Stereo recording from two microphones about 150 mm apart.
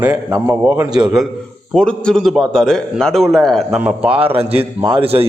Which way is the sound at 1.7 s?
5° left (ahead or behind).